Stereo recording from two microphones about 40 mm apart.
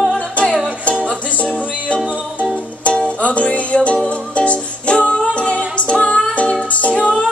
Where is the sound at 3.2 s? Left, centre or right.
Left.